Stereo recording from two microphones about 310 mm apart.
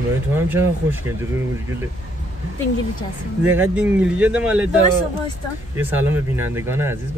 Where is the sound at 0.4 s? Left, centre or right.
Centre.